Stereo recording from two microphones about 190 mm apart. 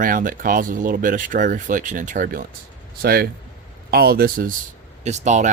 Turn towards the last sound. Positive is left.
turn(degrees=-40)  # may be behind; listen again after turning